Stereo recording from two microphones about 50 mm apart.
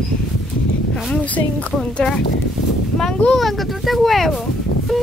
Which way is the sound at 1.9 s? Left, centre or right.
Centre.